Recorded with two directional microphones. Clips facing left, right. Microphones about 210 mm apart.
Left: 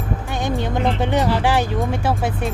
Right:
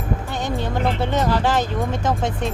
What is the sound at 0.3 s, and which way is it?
Speech, 15° left (ahead or behind).